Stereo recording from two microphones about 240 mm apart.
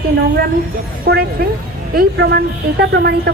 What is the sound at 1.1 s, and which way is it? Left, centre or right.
A woman's voice, right.